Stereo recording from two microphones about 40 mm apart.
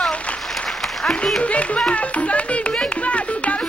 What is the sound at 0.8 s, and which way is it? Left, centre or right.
Applause, centre.